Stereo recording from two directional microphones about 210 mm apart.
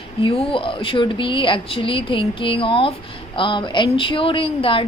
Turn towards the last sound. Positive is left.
turn(degrees=25)  # may be behind; listen again after turning